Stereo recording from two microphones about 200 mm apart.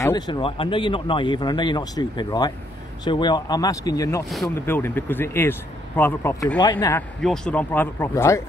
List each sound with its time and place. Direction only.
0.0 s speech: 20° left (ahead or behind)
6.9 s speech: 5° left (ahead or behind)